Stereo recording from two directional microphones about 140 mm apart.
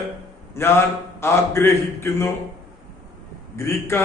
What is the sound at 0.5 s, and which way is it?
A man's voice, 20° left (ahead or behind).